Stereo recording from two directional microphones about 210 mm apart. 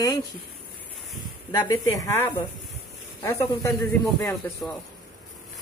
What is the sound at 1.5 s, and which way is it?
Speech, 15° left (ahead or behind).